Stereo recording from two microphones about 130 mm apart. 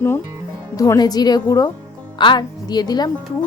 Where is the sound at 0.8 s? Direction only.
30° left (ahead or behind).